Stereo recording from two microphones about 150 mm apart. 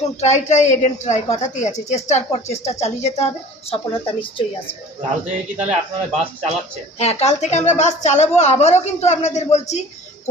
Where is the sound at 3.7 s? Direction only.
35° left (ahead or behind).